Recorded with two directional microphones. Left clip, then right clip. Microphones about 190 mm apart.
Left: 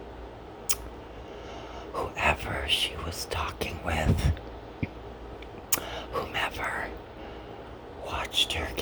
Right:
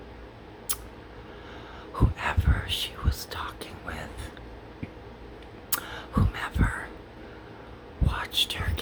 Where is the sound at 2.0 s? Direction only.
25° left (ahead or behind).